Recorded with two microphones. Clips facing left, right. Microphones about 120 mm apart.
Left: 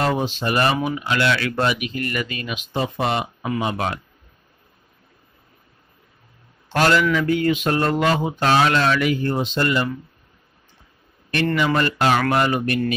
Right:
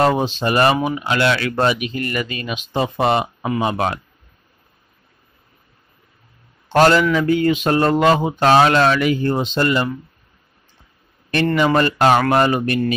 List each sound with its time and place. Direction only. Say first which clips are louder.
0.0 s speech: right 5 dB; 25° right (ahead or behind)
6.7 s speech: right 4 dB; 30° right (ahead or behind)
11.6 s speech: right 6 dB; 35° right (ahead or behind)